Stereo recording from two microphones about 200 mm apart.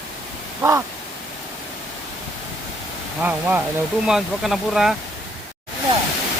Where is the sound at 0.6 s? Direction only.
15° right (ahead or behind).